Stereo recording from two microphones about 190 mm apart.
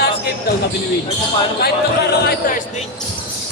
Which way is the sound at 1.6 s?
55° left (ahead or behind).